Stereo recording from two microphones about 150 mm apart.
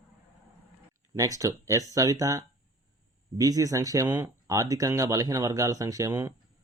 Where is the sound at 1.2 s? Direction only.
20° right (ahead or behind).